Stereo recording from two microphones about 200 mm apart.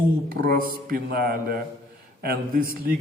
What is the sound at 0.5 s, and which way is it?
A man's voice, 45° right (ahead or behind).